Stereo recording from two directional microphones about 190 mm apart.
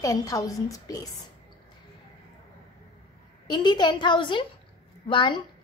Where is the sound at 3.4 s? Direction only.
25° left (ahead or behind).